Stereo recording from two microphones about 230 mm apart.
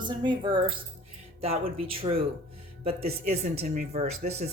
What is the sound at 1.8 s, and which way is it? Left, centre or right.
Speech, right.